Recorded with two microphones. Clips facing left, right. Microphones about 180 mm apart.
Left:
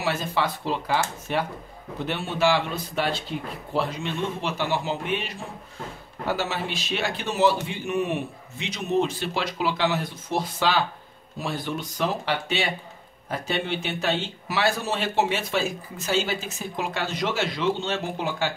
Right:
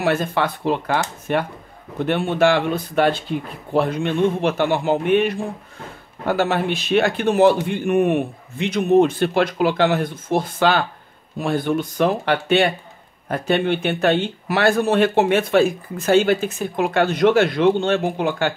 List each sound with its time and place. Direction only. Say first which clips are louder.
0.0 s a man's voice: right 6 dB; 55° right (ahead or behind)